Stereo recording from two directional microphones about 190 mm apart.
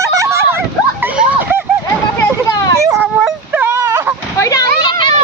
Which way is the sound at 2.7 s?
15° right (ahead or behind).